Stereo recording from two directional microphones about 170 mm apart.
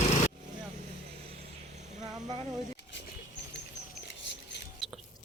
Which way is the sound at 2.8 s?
90° left.